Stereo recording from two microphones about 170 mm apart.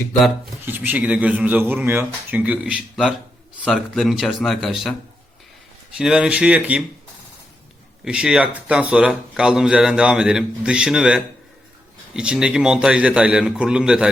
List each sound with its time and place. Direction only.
0.6 s speech: 10° right (ahead or behind)
6.0 s speech: 5° right (ahead or behind)
8.0 s speech: 5° right (ahead or behind)